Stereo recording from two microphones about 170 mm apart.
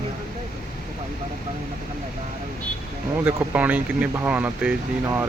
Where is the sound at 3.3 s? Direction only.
10° right (ahead or behind).